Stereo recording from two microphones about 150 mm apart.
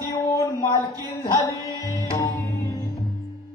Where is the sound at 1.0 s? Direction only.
25° left (ahead or behind).